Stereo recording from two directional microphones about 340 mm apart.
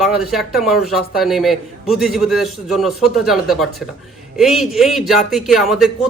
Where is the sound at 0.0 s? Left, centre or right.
Centre.